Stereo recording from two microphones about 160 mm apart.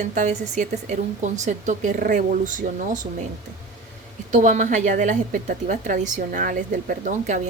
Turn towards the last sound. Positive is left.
turn(degrees=-50)  # may be behind; listen again after turning